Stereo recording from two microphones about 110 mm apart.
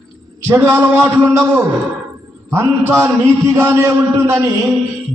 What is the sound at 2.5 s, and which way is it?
A man's voice, 20° right (ahead or behind).